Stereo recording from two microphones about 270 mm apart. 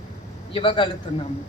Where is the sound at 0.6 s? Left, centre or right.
Centre.